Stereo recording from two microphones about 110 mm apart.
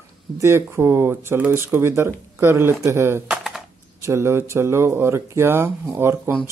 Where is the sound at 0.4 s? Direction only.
25° right (ahead or behind).